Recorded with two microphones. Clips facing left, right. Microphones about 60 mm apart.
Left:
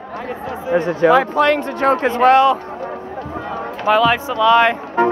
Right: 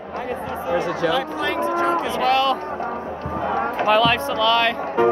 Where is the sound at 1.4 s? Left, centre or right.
Left.